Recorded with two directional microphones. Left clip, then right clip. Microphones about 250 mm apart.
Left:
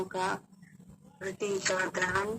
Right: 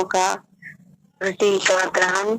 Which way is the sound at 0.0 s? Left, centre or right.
Right.